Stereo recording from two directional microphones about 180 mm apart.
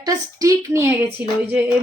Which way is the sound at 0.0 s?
20° right (ahead or behind).